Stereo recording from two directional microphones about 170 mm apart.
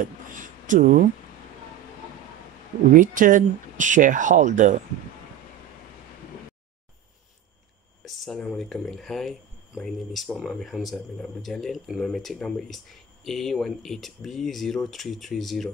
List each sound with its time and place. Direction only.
0.0 s a sound: 50° right (ahead or behind)
2.9 s speech: 50° right (ahead or behind)
8.0 s speech: centre (ahead or behind)